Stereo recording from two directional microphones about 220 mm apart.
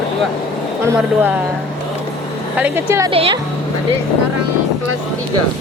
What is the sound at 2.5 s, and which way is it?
Speech, 10° right (ahead or behind).